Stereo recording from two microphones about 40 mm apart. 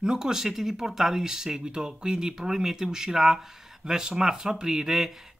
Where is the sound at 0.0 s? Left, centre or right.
Centre.